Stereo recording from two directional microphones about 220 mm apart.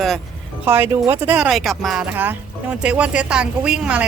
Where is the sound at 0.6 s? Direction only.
10° right (ahead or behind).